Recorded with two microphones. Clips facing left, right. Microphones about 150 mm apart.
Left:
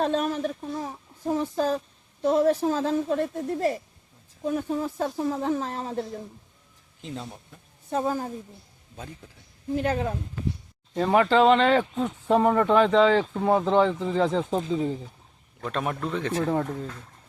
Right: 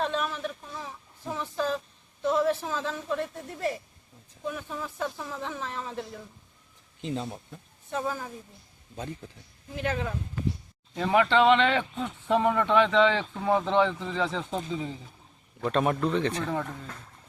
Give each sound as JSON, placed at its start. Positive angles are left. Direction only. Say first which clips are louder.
{"t": 0.0, "sound": "speech", "louder": "left 5 dB", "side_deg": 40}
{"t": 7.0, "sound": "speech", "louder": "right 4 dB", "side_deg": 0}
{"t": 7.9, "sound": "speech", "louder": "left 5 dB", "side_deg": 35}
{"t": 9.7, "sound": "speech", "louder": "left 5 dB", "side_deg": 35}
{"t": 15.6, "sound": "speech", "louder": "right 4 dB", "side_deg": 0}